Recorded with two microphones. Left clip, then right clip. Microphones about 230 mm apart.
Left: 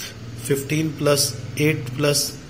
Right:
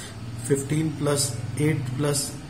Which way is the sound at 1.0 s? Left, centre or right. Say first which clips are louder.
Left 10 dB; centre.